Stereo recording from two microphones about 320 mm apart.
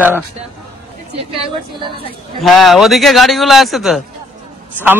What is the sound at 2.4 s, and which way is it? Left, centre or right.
A man's voice, centre.